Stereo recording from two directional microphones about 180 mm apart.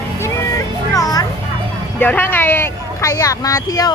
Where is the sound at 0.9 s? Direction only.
20° left (ahead or behind).